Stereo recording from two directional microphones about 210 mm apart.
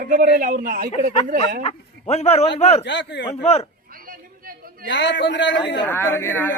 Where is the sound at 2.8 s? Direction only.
55° left (ahead or behind).